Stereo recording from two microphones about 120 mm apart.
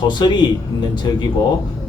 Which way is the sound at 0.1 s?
40° left (ahead or behind).